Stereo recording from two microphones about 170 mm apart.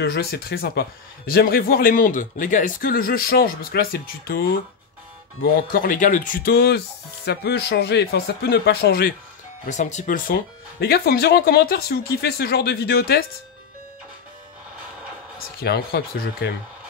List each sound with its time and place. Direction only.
0.0 s a man's voice: 65° left (ahead or behind)
7.2 s speech: 75° left (ahead or behind)
9.7 s a man's voice: 45° left (ahead or behind); by 13.2 s 65° left (ahead or behind)
15.6 s a man's voice: 65° left (ahead or behind)